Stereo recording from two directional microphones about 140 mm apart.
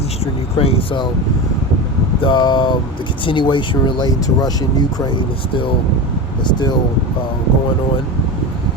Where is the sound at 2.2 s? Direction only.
35° left (ahead or behind).